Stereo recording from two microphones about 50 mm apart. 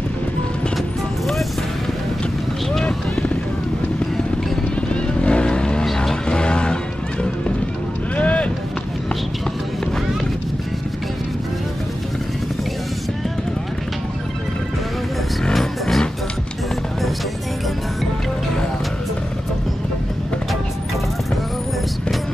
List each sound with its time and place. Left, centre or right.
5.2 s vehicle: left
5.9 s music: centre
6.2 s music: centre
8.2 s run: left
15.5 s music: centre